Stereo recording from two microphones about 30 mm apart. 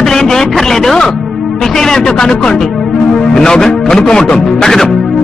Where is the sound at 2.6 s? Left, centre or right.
Centre.